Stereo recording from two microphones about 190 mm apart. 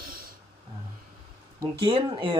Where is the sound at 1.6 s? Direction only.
25° right (ahead or behind).